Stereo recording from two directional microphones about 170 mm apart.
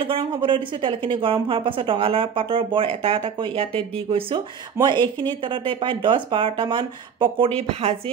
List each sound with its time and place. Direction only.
0.0 s speech: 30° right (ahead or behind)